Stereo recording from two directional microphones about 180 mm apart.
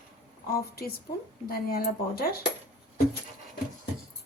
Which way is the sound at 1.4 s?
55° left (ahead or behind).